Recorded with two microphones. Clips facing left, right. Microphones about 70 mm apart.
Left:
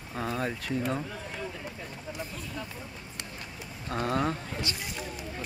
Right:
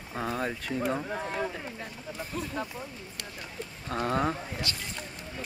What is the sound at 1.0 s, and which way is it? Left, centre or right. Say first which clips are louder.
Speech: right 6 dB; right.